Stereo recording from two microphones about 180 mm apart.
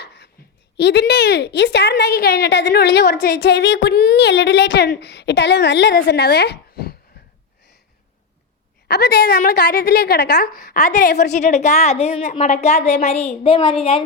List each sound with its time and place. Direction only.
0.8 s a woman's voice: 70° left (ahead or behind)
8.9 s a woman's voice: 60° left (ahead or behind)
11.3 s a woman's voice: 40° left (ahead or behind)